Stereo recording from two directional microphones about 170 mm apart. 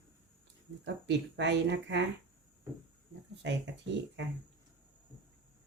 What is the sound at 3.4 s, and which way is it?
Speech, 90° right.